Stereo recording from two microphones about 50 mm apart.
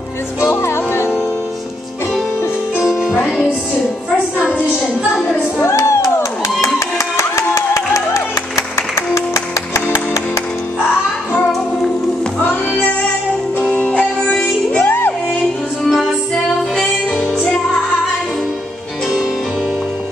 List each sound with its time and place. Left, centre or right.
0.4 s music: left
2.8 s music: centre
5.2 s music: left
5.8 s a sound: left
7.2 s music: left
9.1 s music: left
13.7 s music: left
14.4 s music: left
15.8 s music: centre